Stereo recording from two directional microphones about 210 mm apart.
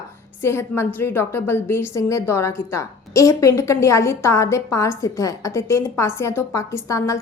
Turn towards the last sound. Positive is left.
turn(degrees=15)  # may be behind; listen again after turning